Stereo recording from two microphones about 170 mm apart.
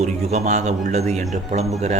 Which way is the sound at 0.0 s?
40° right (ahead or behind).